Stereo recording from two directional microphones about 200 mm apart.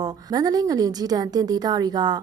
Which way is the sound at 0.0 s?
20° right (ahead or behind).